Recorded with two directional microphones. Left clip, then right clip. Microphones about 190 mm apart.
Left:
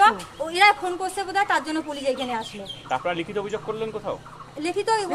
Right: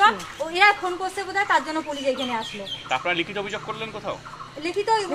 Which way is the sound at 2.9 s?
60° left (ahead or behind).